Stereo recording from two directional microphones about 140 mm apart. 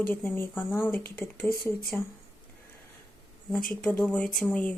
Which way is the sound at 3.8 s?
10° left (ahead or behind).